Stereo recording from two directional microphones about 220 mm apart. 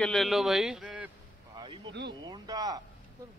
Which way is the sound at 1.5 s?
20° right (ahead or behind).